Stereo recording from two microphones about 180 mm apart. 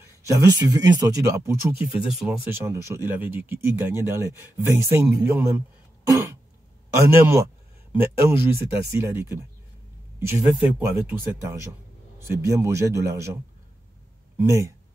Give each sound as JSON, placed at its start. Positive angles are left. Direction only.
{"t": 0.0, "sound": "speech", "side_deg": -15}
{"t": 2.0, "sound": "speech", "side_deg": -5}
{"t": 2.5, "sound": "speech", "side_deg": -15}
{"t": 6.0, "sound": "throat clearing", "side_deg": -15}
{"t": 7.1, "sound": "speech", "side_deg": -15}
{"t": 12.2, "sound": "speech", "side_deg": -15}